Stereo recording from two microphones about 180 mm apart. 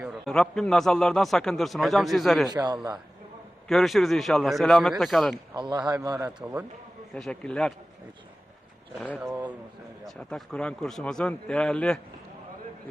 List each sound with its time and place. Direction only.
0.0 s a man's voice: centre (ahead or behind)
2.5 s a man's voice: 25° right (ahead or behind)
3.7 s a man's voice: centre (ahead or behind)
5.5 s a man's voice: 25° right (ahead or behind)
6.4 s a man's voice: 5° right (ahead or behind)
7.1 s a man's voice: 5° left (ahead or behind)
9.0 s a man's voice: centre (ahead or behind)